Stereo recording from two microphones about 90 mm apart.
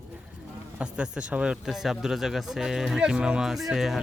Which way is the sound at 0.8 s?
10° right (ahead or behind).